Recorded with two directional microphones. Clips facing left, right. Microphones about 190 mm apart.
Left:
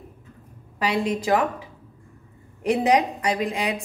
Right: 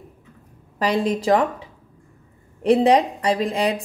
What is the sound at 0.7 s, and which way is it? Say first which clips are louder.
Speech: right 3 dB; 35° right (ahead or behind).